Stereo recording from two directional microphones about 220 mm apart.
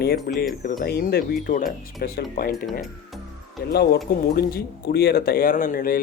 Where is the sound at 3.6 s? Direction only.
45° left (ahead or behind).